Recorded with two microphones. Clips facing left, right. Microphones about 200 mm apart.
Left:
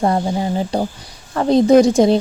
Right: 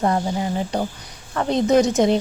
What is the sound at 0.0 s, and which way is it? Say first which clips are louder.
A woman's voice: left 3 dB; 30° left (ahead or behind).